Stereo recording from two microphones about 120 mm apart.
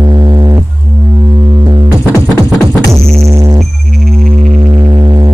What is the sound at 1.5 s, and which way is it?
Music, 40° right (ahead or behind).